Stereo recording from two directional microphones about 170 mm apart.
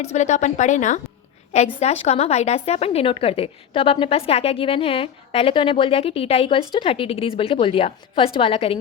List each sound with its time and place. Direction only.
0.0 s a woman's voice: 40° left (ahead or behind)